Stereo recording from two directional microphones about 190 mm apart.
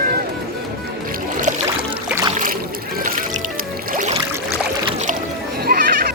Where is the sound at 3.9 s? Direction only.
35° right (ahead or behind).